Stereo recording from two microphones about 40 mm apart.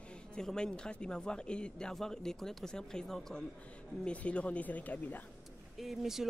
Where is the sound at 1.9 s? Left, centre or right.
Centre.